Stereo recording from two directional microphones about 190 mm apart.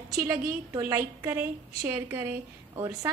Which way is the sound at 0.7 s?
15° right (ahead or behind).